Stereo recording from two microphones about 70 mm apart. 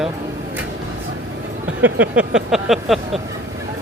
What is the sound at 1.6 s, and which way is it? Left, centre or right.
Speech, right.